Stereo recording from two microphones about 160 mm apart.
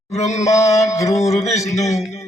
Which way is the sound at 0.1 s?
45° left (ahead or behind).